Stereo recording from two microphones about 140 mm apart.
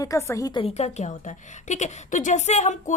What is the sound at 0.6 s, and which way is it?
A woman's voice, 50° left (ahead or behind).